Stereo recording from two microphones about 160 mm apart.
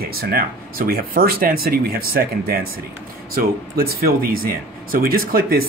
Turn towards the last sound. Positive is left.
turn(degrees=-65)  # may be behind; listen again after turning